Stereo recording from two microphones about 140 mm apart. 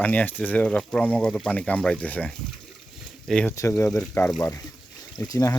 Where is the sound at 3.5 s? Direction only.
20° left (ahead or behind).